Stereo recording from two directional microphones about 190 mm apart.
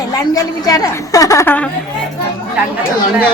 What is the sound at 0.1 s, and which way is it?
A woman's voice, 20° left (ahead or behind).